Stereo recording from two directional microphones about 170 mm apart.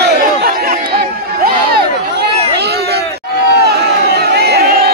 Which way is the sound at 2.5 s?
75° right (ahead or behind).